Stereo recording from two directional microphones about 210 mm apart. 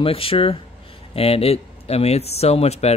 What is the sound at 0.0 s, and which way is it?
Speech, 25° left (ahead or behind).